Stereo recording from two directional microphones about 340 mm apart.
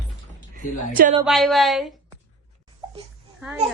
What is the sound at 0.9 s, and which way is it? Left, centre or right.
Speech, right.